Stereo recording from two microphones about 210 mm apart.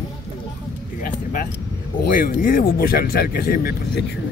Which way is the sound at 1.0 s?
40° left (ahead or behind).